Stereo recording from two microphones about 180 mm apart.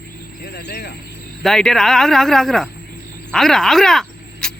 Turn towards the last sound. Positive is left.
turn(degrees=5)  # may be behind; listen again after turning